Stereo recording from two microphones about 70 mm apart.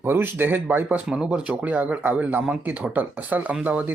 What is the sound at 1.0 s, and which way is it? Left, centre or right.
Speech, centre.